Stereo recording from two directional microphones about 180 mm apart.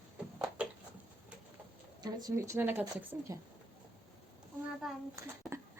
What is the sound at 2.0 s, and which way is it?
A woman's voice, 20° right (ahead or behind).